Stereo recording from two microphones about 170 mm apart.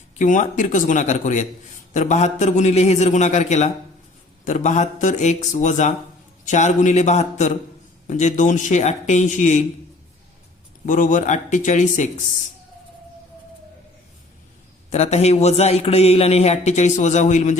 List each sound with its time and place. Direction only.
0.2 s a man's voice: 45° left (ahead or behind)
10.8 s a man's voice: 50° left (ahead or behind)
14.8 s a man's voice: 40° left (ahead or behind)